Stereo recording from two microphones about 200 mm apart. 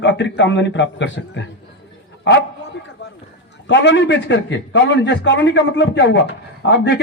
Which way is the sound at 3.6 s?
60° left (ahead or behind).